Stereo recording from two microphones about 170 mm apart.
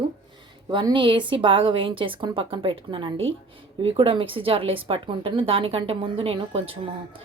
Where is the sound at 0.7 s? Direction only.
25° right (ahead or behind).